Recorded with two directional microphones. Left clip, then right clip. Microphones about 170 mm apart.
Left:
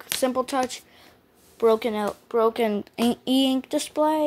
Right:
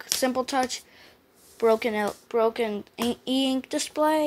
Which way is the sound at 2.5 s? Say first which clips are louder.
Left 4 dB; 35° left (ahead or behind).